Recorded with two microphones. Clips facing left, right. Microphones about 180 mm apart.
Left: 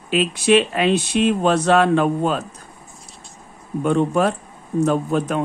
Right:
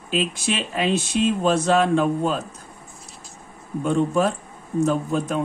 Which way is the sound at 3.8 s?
60° left (ahead or behind).